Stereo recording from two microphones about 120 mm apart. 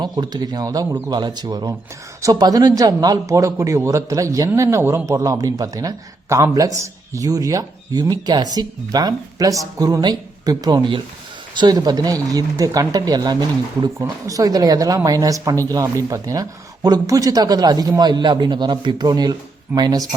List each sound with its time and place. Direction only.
0.0 s speech: 35° right (ahead or behind)
0.9 s a man's voice: 20° right (ahead or behind)
1.1 s a man's voice: 35° right (ahead or behind)